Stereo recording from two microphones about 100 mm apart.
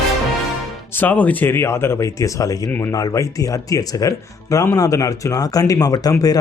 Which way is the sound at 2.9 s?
35° left (ahead or behind).